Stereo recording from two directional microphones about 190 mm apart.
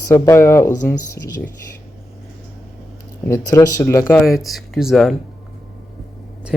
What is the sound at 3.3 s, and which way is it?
Speech, 15° left (ahead or behind).